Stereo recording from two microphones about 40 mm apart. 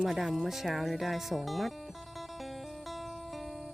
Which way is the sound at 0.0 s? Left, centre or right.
Centre.